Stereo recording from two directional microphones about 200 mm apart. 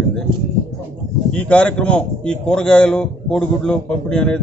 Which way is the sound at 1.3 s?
5° left (ahead or behind).